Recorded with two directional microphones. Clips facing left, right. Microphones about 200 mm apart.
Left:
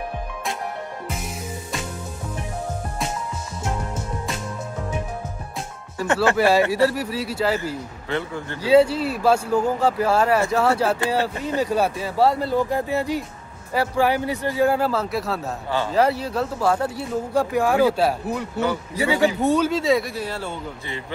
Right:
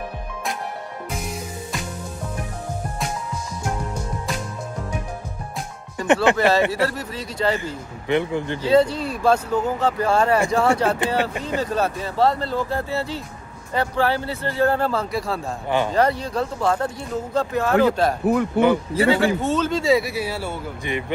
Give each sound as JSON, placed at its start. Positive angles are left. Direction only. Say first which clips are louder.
{"t": 6.3, "sound": "speech", "louder": "left 1 dB", "side_deg": 10}
{"t": 8.1, "sound": "speech", "louder": "right 6 dB", "side_deg": -20}
{"t": 8.6, "sound": "speech", "louder": "left 2 dB", "side_deg": 10}
{"t": 18.2, "sound": "speech", "louder": "right 8 dB", "side_deg": -55}
{"t": 18.9, "sound": "speech", "louder": "right 2 dB", "side_deg": 15}